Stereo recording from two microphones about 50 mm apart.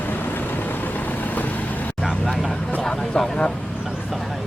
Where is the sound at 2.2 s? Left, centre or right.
Centre.